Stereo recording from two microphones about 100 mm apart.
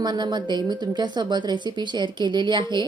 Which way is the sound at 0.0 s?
45° right (ahead or behind).